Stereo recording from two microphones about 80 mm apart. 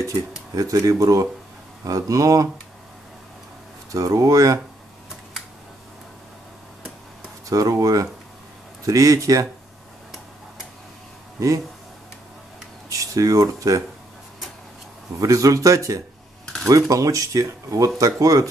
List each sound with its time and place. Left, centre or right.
0.6 s speech: right
3.9 s speech: right
7.4 s speech: right
11.3 s speech: right
12.9 s speech: right
15.1 s speech: right